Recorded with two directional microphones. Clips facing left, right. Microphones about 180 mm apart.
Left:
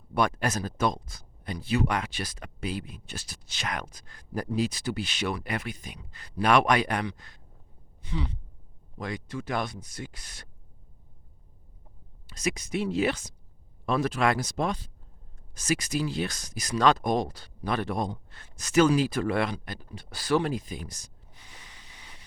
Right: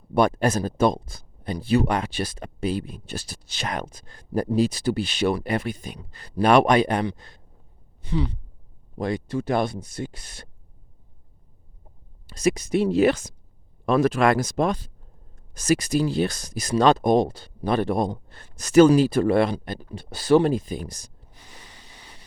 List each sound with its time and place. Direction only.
0.1 s speech: 30° right (ahead or behind)
12.3 s speech: 30° right (ahead or behind); by 14.8 s 50° right (ahead or behind)
15.5 s speech: 35° right (ahead or behind)
19.9 s a sound: 25° right (ahead or behind)